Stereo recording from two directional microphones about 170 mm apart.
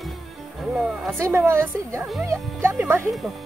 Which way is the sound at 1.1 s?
15° right (ahead or behind).